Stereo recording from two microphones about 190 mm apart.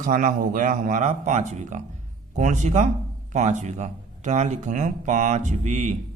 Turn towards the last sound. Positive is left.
turn(degrees=-40)  # may be behind; listen again after turning